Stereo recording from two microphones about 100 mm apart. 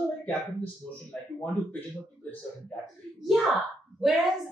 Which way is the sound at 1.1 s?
20° left (ahead or behind).